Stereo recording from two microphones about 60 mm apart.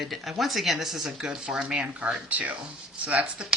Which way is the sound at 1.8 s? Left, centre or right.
Right.